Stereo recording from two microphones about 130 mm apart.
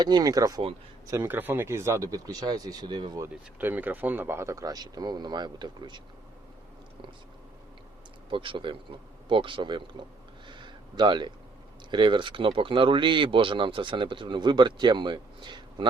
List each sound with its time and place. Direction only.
0.0 s speech: 30° right (ahead or behind)
1.1 s speech: 20° right (ahead or behind); by 3.2 s 35° right (ahead or behind)
3.6 s speech: 15° right (ahead or behind); by 6.0 s 35° right (ahead or behind)
8.3 s speech: 40° right (ahead or behind)
10.4 s a sound: 35° right (ahead or behind)
11.9 s speech: 35° right (ahead or behind)